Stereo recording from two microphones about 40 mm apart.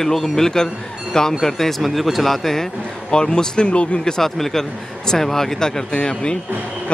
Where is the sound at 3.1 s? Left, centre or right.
Centre.